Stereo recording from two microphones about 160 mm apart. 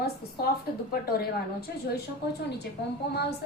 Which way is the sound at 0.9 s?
75° left (ahead or behind).